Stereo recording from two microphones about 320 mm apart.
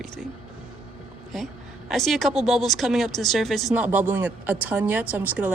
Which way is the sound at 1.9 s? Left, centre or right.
Centre.